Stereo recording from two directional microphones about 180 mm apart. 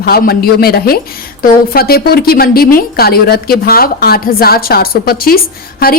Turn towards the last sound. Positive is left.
turn(degrees=55)  # may be behind; listen again after turning